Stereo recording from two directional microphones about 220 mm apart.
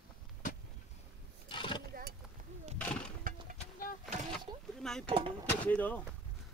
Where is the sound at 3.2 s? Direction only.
40° right (ahead or behind).